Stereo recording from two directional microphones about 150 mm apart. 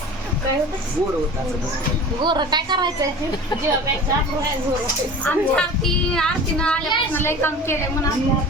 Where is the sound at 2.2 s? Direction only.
30° right (ahead or behind).